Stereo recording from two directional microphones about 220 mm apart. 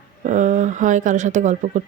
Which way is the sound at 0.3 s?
35° right (ahead or behind).